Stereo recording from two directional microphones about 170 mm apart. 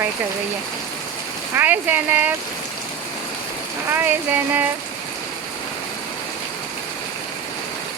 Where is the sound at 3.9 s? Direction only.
10° right (ahead or behind).